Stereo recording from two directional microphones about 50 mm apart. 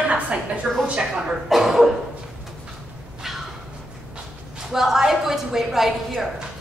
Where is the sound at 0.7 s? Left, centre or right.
Centre.